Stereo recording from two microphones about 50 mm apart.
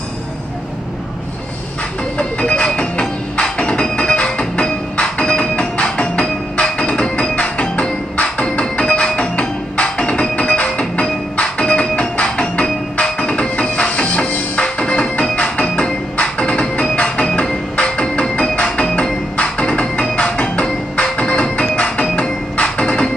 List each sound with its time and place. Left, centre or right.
2.1 s music: left